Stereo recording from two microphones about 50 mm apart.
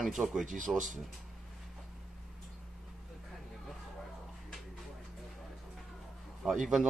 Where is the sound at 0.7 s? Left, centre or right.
Centre.